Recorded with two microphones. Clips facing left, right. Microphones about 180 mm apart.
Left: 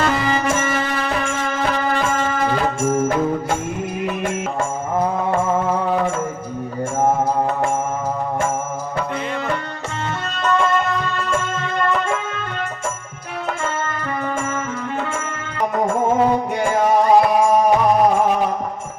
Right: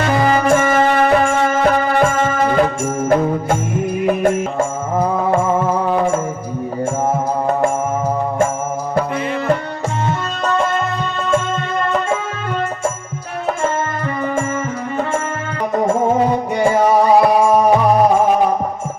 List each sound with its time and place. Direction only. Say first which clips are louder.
0.1 s music: right 6 dB; 50° right (ahead or behind)
4.0 s music: right 9 dB; 50° right (ahead or behind)